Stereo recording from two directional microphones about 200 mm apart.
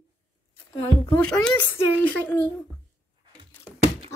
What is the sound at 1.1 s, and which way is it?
Speech, 5° left (ahead or behind).